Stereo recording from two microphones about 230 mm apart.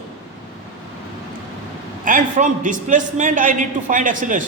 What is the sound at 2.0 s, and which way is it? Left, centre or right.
A man's voice, right.